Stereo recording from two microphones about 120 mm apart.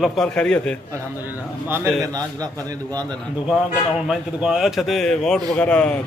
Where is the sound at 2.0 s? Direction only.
30° right (ahead or behind).